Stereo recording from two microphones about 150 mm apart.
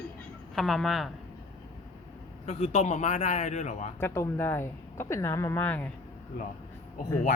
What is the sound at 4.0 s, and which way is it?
Speech, 15° left (ahead or behind).